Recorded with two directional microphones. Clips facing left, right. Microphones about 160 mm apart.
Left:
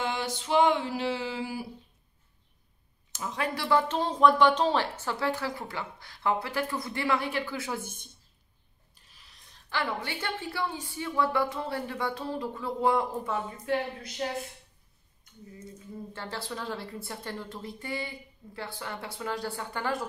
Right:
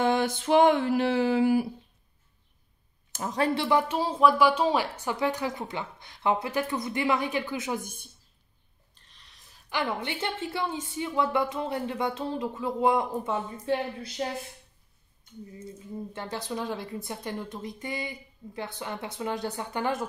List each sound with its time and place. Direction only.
0.0 s a sound: 50° right (ahead or behind)
3.1 s speech: 45° right (ahead or behind)
3.6 s a woman's voice: 15° right (ahead or behind)
8.9 s a sound: 5° left (ahead or behind)
9.7 s speech: 20° right (ahead or behind)
16.1 s speech: 20° right (ahead or behind)